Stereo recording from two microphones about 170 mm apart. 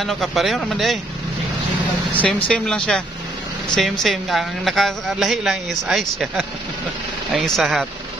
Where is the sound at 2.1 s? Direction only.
5° left (ahead or behind).